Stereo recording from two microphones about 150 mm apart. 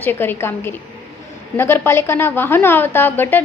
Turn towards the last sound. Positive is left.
turn(degrees=15)  # may be behind; listen again after turning